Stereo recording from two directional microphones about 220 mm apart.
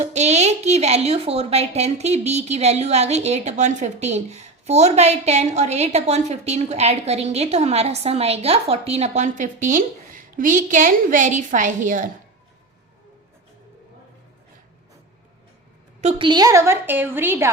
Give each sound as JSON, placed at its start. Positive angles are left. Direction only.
{"t": 0.0, "sound": "a woman's voice", "side_deg": -30}
{"t": 16.0, "sound": "a woman's voice", "side_deg": -25}